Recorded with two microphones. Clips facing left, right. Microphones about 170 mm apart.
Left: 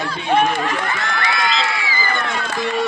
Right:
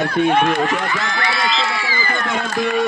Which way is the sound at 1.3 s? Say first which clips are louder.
Even; 30° right (ahead or behind).